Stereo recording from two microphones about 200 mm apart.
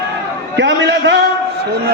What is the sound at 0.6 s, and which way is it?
Speech, 65° right (ahead or behind).